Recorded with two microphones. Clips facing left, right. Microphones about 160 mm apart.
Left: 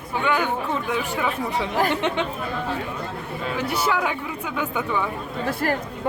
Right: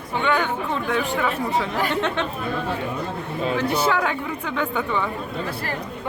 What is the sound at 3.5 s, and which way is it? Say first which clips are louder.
Speech: right 2 dB; 10° left (ahead or behind).